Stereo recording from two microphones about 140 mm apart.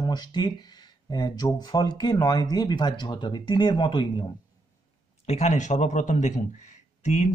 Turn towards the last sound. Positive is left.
turn(degrees=55)  # may be behind; listen again after turning